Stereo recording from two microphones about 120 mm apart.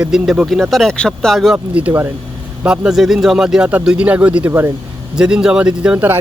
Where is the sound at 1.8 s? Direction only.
15° right (ahead or behind).